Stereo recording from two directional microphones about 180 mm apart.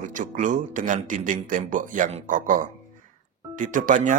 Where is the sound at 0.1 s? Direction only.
45° right (ahead or behind).